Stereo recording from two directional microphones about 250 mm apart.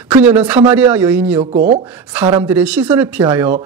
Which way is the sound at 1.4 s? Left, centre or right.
Right.